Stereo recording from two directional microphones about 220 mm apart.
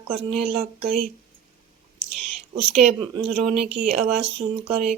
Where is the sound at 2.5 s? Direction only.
20° right (ahead or behind).